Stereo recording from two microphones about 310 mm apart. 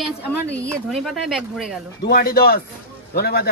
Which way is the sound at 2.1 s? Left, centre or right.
Left.